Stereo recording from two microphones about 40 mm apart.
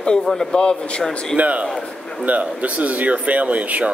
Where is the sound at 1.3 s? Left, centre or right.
Right.